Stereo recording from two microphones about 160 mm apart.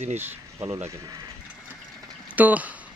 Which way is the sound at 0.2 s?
15° right (ahead or behind).